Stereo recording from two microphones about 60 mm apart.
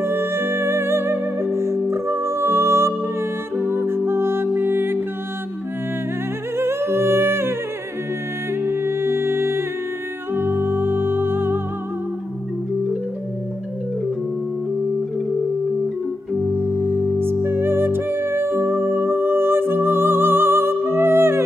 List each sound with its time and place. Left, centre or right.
0.0 s music: right
6.6 s humming: right
8.6 s music: right
16.5 s music: right